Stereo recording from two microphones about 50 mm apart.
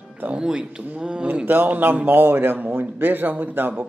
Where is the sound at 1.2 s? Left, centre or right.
Right.